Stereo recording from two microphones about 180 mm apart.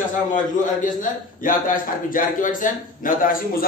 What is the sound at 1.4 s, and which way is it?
A man's voice, 50° left (ahead or behind).